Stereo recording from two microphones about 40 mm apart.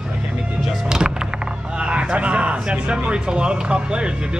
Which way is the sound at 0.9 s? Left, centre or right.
Centre.